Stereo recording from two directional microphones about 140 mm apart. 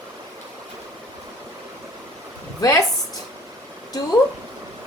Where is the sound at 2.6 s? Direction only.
25° left (ahead or behind).